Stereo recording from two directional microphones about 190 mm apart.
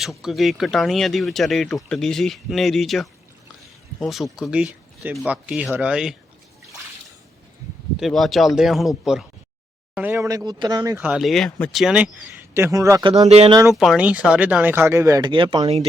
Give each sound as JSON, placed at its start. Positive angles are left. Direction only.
{"t": 0.0, "sound": "speech", "side_deg": 0}
{"t": 7.9, "sound": "speech", "side_deg": 0}
{"t": 11.0, "sound": "speech", "side_deg": -5}
{"t": 12.5, "sound": "speech", "side_deg": -15}
{"t": 13.5, "sound": "speech", "side_deg": -15}
{"t": 13.7, "sound": "speech", "side_deg": -5}